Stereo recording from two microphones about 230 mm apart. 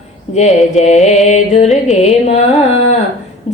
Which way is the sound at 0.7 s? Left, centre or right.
Left.